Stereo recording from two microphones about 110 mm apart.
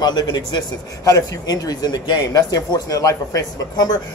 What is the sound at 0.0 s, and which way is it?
Speech, 40° left (ahead or behind).